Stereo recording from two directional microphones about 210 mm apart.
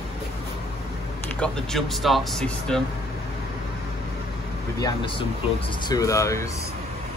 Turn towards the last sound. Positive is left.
turn(degrees=15)  # may be behind; listen again after turning